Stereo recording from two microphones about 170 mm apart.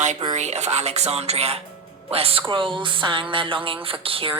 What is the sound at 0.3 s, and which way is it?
A woman's voice, 40° right (ahead or behind).